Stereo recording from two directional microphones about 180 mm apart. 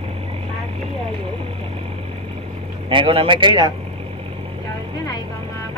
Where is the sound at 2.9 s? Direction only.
30° right (ahead or behind).